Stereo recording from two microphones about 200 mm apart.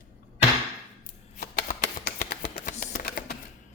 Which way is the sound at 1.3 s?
40° left (ahead or behind).